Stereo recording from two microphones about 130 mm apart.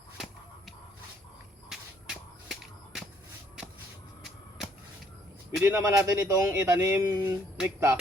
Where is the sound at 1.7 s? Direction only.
5° right (ahead or behind).